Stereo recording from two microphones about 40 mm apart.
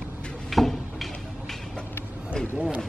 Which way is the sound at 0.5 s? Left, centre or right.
Centre.